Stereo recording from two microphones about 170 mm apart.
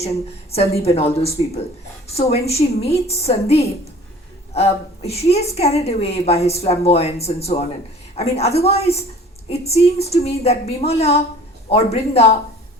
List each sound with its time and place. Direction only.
0.8 s a woman's voice: 35° left (ahead or behind)